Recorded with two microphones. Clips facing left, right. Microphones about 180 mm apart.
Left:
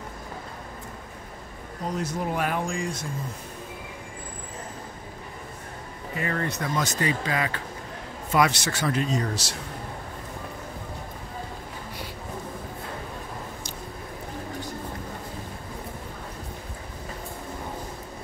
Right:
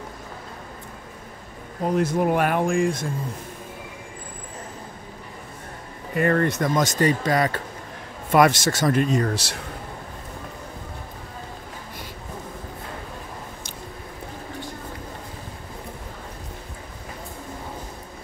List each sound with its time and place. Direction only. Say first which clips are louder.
1.9 s speech: right 8 dB; 60° right (ahead or behind)
6.1 s speech: right 9 dB; 55° right (ahead or behind)